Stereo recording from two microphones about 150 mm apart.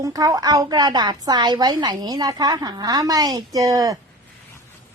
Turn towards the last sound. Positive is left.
turn(degrees=-25)  # may be behind; listen again after turning